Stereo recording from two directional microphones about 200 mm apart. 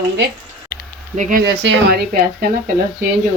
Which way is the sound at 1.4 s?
55° right (ahead or behind).